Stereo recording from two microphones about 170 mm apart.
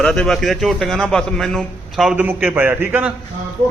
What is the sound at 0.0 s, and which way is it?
A man's voice, 5° left (ahead or behind).